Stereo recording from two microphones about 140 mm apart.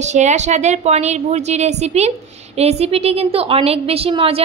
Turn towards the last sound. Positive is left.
turn(degrees=-45)  # may be behind; listen again after turning